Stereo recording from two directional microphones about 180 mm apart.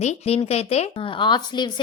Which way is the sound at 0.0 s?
35° left (ahead or behind).